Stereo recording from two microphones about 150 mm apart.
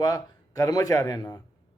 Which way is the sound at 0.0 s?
25° left (ahead or behind).